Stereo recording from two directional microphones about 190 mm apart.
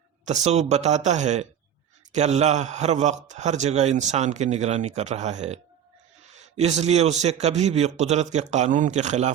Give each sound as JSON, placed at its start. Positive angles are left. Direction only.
{"t": 0.3, "sound": "a man's voice", "side_deg": -35}
{"t": 6.6, "sound": "a man's voice", "side_deg": -35}